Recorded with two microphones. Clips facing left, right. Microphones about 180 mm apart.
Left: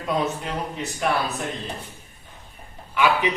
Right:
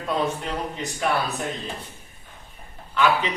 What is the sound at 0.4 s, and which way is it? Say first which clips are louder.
Speech: even; centre (ahead or behind).